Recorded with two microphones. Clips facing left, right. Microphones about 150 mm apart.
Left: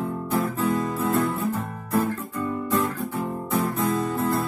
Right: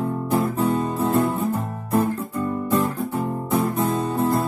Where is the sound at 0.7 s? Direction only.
35° right (ahead or behind).